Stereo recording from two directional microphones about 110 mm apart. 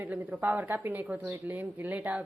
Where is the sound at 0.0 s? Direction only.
15° right (ahead or behind).